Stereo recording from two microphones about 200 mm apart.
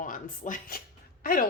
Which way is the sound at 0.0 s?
40° left (ahead or behind).